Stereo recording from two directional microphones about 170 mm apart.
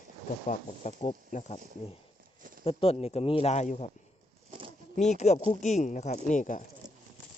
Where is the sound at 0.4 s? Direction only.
45° left (ahead or behind).